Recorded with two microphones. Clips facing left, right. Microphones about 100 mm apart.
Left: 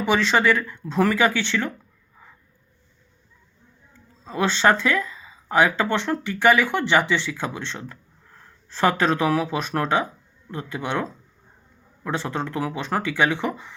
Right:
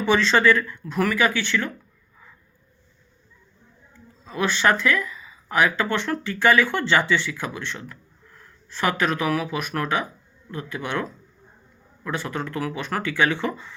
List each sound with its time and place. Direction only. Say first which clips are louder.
0.0 s speech: right 1 dB; 15° left (ahead or behind)
4.3 s speech: left 2 dB; 25° left (ahead or behind)